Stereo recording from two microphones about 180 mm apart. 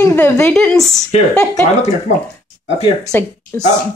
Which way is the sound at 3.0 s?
10° left (ahead or behind).